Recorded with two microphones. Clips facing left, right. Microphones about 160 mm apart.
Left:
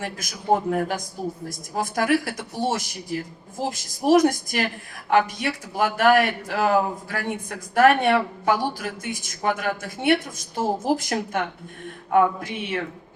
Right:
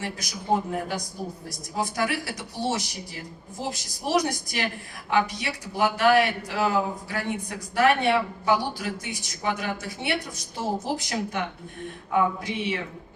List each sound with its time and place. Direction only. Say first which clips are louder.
0.0 s a man's voice: left 2 dB; 50° left (ahead or behind)